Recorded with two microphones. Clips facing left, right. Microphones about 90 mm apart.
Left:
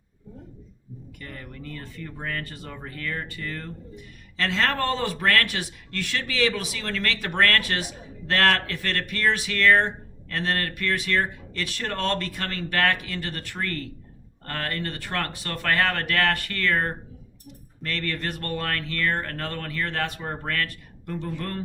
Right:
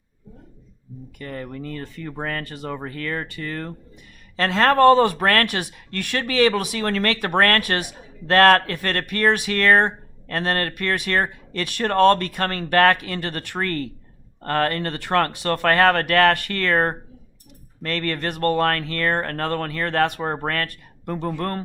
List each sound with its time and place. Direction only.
1.2 s speech: 60° right (ahead or behind); by 2.6 s 75° right (ahead or behind)
2.6 s speech: 60° right (ahead or behind)
4.4 s speech: 50° right (ahead or behind)